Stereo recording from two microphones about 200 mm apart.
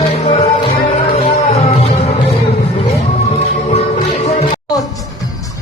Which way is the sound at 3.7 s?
35° left (ahead or behind).